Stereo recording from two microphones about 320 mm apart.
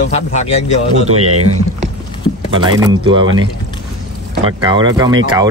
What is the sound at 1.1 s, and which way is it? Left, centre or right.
Speech, right.